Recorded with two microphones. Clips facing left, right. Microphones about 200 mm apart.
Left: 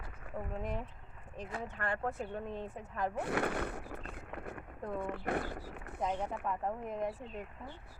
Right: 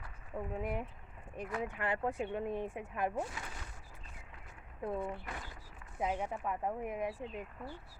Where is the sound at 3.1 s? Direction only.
65° left (ahead or behind).